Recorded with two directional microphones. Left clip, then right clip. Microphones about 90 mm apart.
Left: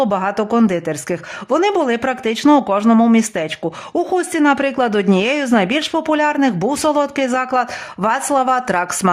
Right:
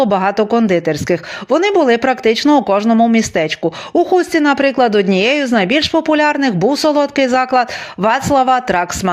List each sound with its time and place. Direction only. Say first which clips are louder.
0.1 s speech: right 4 dB; 20° right (ahead or behind)
1.5 s speech: right 4 dB; 5° right (ahead or behind)